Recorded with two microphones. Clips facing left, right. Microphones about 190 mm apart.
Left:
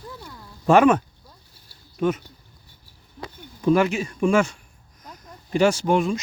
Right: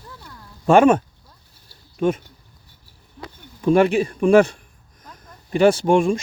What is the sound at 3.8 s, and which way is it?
Speech, 35° right (ahead or behind).